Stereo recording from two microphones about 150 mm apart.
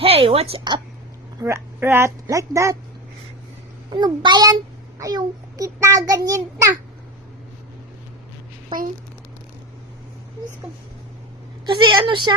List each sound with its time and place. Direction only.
0.0 s a woman's voice: 40° right (ahead or behind)
1.4 s a child's voice: 20° right (ahead or behind)
3.9 s a child's voice: 30° right (ahead or behind)
11.6 s a woman's voice: 30° right (ahead or behind)